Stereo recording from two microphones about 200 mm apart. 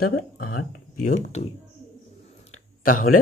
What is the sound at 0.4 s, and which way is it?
Speech, 90° left.